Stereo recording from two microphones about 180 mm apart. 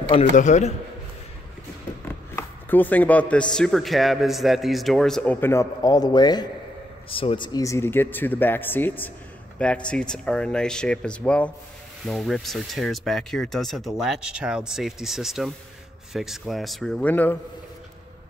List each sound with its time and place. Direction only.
0.1 s a man's voice: 40° left (ahead or behind)
2.3 s a man's voice: 10° left (ahead or behind)